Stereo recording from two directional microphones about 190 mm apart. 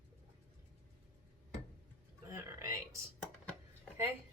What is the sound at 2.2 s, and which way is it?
Speech, 15° right (ahead or behind).